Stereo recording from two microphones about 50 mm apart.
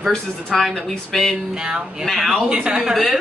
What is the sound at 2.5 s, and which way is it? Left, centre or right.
Speech, centre.